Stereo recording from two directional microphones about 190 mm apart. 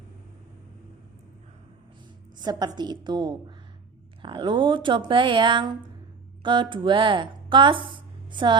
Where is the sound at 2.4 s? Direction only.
20° right (ahead or behind).